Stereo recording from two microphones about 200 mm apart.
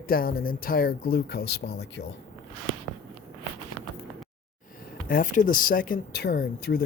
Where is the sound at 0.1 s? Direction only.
50° left (ahead or behind).